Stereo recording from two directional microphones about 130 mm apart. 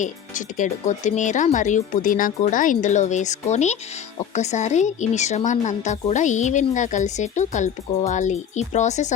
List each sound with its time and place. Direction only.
0.0 s a woman's voice: 75° left (ahead or behind)